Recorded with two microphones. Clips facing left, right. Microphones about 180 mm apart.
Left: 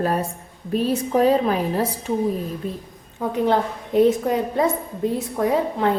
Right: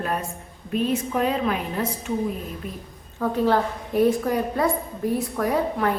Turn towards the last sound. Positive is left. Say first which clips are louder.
# left 3 dB
turn(degrees=25)  # may be behind; listen again after turning